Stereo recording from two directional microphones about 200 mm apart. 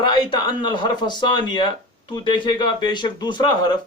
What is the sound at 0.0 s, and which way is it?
A man's voice, 25° left (ahead or behind).